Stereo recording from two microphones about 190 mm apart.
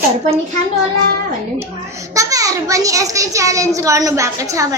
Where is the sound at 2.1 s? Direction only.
15° right (ahead or behind).